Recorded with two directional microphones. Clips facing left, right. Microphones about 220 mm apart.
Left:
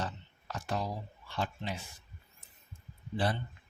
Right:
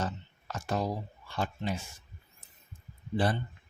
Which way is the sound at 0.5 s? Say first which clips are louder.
Right 4 dB; 45° right (ahead or behind).